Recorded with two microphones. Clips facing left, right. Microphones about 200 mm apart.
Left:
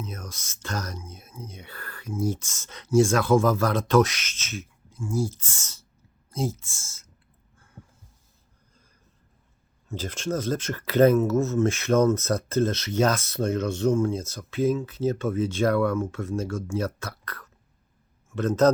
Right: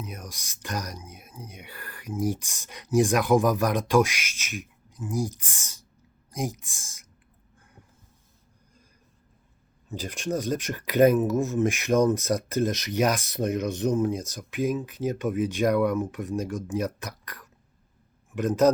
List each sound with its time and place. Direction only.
0.0 s speech: 15° right (ahead or behind)
9.9 s a man's voice: 15° right (ahead or behind)